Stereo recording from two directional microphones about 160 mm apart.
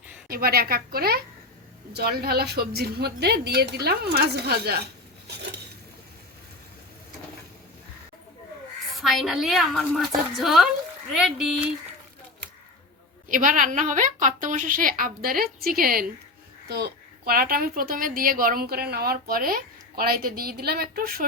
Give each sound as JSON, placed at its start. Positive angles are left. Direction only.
{"t": 0.3, "sound": "a woman's voice", "side_deg": -70}
{"t": 9.0, "sound": "a woman's voice", "side_deg": 0}
{"t": 13.2, "sound": "a woman's voice", "side_deg": -55}
{"t": 16.6, "sound": "a woman's voice", "side_deg": -80}